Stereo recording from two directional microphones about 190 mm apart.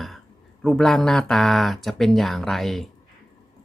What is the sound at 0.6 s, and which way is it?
Speech, 5° left (ahead or behind).